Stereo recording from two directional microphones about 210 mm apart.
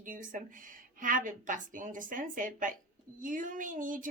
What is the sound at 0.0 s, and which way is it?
Speech, 40° right (ahead or behind).